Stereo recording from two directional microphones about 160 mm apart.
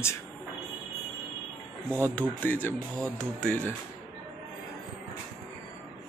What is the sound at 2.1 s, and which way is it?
A man's voice, 10° left (ahead or behind).